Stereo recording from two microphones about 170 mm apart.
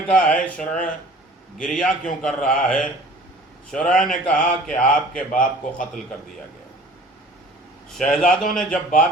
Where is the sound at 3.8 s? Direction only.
50° left (ahead or behind).